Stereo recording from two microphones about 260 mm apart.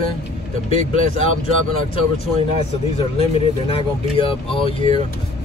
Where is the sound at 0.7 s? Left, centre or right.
Left.